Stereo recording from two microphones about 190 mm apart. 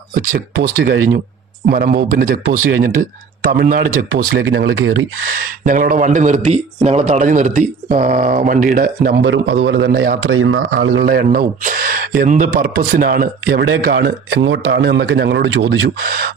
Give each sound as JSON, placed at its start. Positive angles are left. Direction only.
{"t": 0.3, "sound": "a man's voice", "side_deg": -50}
{"t": 4.4, "sound": "speech", "side_deg": -90}
{"t": 5.6, "sound": "a man's voice", "side_deg": -45}
{"t": 9.2, "sound": "a man's voice", "side_deg": -75}
{"t": 13.5, "sound": "a man's voice", "side_deg": -60}